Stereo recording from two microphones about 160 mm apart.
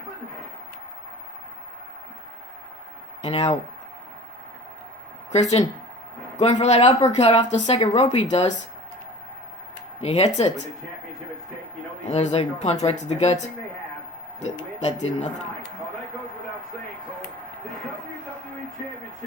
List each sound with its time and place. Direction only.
3.2 s speech: 40° left (ahead or behind)
5.3 s speech: 45° left (ahead or behind)
10.0 s speech: 40° left (ahead or behind)
12.0 s speech: 45° left (ahead or behind)
14.4 s speech: 45° left (ahead or behind)